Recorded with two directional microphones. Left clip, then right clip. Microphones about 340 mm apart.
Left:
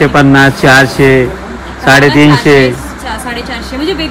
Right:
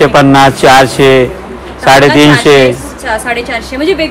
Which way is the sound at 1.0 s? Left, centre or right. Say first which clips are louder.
Right 2 dB; right.